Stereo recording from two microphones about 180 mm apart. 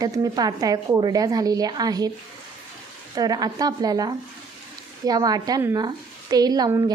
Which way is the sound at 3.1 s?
20° right (ahead or behind).